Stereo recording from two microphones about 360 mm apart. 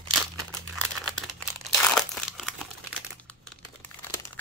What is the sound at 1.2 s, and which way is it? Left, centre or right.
Crumpling, centre.